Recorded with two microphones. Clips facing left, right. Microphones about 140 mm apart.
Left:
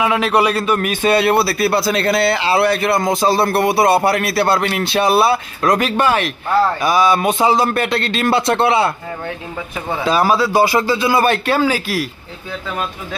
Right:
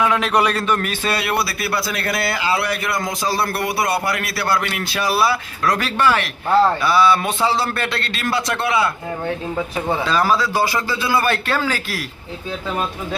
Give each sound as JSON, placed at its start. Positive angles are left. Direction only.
{"t": 0.0, "sound": "a man's voice", "side_deg": 5}
{"t": 1.1, "sound": "a man's voice", "side_deg": 30}
{"t": 10.0, "sound": "a man's voice", "side_deg": 15}